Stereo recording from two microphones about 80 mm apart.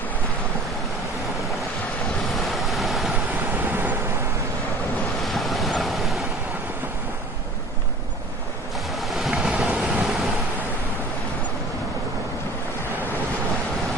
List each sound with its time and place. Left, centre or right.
2.3 s waves: centre
3.3 s vehicle: right
5.2 s waves: centre
9.0 s vehicle: centre